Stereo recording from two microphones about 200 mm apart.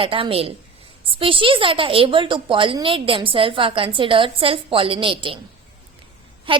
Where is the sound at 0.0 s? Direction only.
25° right (ahead or behind).